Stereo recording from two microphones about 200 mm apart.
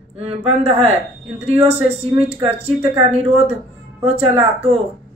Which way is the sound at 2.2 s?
30° right (ahead or behind).